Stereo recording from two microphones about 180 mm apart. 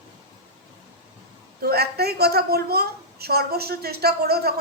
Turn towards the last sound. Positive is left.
turn(degrees=-60)  # may be behind; listen again after turning